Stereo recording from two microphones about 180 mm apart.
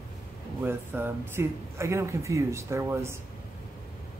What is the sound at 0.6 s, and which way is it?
Speech, 10° right (ahead or behind).